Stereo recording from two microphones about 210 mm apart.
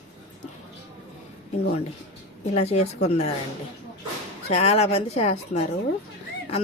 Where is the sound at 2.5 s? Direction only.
30° left (ahead or behind).